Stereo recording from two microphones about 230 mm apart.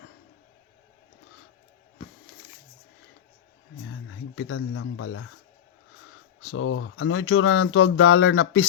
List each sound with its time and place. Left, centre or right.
3.8 s speech: left
6.4 s speech: left